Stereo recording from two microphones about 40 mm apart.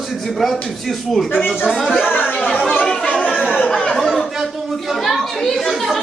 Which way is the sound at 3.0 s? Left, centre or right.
Left.